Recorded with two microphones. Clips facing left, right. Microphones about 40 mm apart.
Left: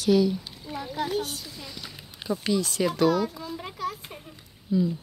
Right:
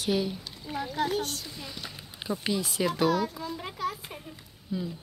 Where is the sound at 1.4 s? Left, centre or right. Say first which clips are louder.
Even; centre.